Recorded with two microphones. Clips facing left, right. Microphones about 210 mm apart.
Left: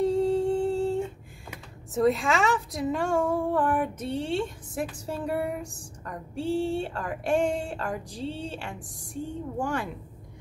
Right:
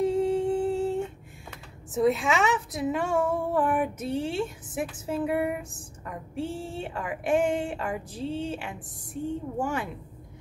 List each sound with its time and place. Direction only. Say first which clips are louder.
0.0 s humming: left 1 dB; centre (ahead or behind)
2.0 s a woman's voice: even; centre (ahead or behind)
6.5 s speech: left 9 dB; 30° left (ahead or behind)
6.8 s a woman's voice: left 1 dB; 5° right (ahead or behind)